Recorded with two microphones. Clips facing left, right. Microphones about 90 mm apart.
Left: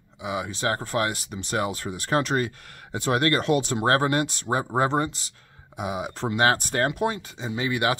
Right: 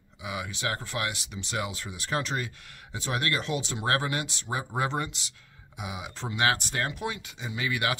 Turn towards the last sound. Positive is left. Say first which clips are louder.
# left 5 dB
turn(degrees=30)  # may be behind; listen again after turning